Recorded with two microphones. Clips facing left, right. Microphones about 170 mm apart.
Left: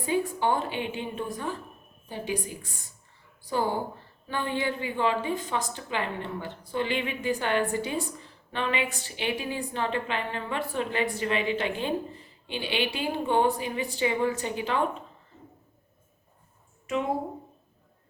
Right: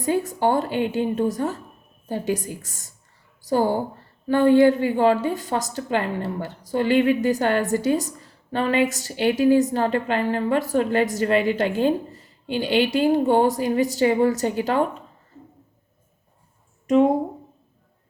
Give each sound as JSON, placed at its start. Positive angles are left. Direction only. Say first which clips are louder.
{"t": 0.0, "sound": "a woman's voice", "louder": "right 5 dB", "side_deg": -40}